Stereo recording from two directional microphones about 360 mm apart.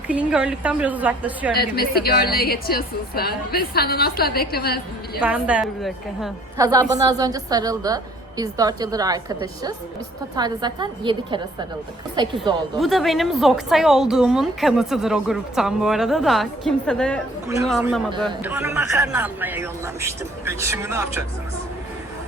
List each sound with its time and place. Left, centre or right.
0.1 s a woman's voice: centre
1.5 s a woman's voice: left
5.2 s a woman's voice: centre
12.8 s a woman's voice: centre